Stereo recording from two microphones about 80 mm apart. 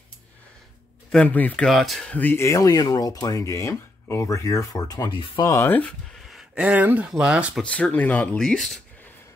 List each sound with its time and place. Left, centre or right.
1.2 s speech: left
1.7 s speech: centre
2.0 s speech: centre
2.3 s speech: left
5.6 s speech: left
6.2 s a sound: centre
6.6 s speech: centre
7.6 s speech: centre